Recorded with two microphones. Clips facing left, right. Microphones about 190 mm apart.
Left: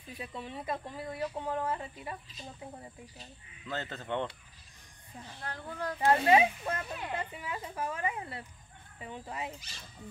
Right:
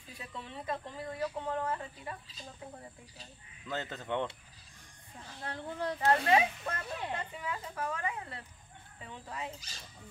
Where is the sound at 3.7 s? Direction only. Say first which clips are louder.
Even; 15° right (ahead or behind).